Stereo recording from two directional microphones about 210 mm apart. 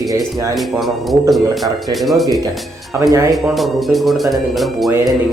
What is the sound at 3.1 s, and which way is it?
Speech, 15° right (ahead or behind).